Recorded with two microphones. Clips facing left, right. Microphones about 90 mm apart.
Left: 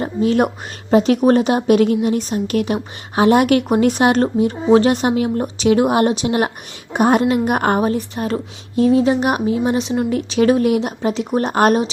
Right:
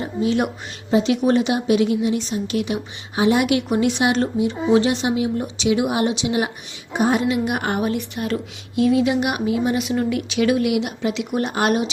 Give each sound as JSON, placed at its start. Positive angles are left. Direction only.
{"t": 0.0, "sound": "a woman's voice", "side_deg": 45}